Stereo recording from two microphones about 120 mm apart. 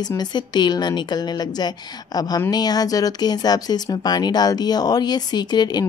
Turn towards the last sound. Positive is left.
turn(degrees=35)  # may be behind; listen again after turning